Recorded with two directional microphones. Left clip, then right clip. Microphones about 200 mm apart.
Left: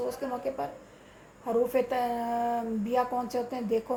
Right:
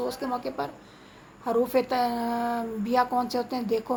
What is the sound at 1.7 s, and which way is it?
Speech, 15° right (ahead or behind).